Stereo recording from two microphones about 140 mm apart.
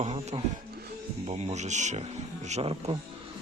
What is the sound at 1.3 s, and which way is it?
Speech, 55° right (ahead or behind).